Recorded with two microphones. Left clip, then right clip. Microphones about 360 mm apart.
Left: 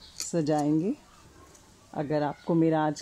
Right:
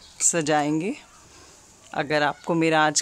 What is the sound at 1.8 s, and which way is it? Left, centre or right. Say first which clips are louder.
Speech: right 6 dB; right.